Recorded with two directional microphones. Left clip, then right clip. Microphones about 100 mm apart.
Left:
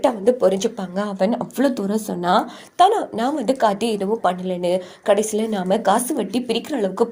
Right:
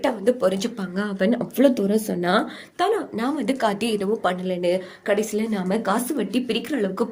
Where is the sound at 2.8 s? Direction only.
55° left (ahead or behind).